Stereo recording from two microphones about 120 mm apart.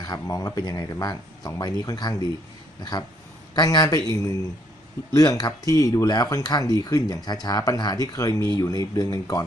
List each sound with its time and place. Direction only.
0.0 s speech: 30° left (ahead or behind)